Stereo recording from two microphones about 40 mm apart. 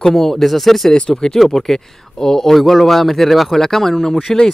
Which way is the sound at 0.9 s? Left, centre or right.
Centre.